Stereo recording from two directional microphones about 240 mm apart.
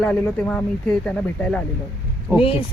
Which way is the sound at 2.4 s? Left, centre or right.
Left.